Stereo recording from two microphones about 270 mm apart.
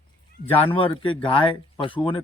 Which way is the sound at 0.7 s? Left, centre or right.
Centre.